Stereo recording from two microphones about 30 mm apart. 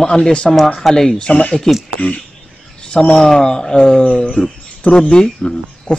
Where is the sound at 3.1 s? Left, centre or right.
Centre.